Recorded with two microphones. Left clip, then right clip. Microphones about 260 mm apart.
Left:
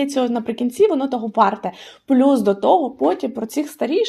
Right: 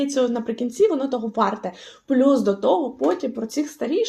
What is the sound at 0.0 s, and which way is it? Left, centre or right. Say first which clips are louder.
A woman's voice: left 1 dB; left.